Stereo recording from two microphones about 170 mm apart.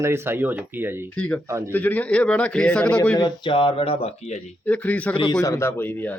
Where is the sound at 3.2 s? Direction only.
30° left (ahead or behind).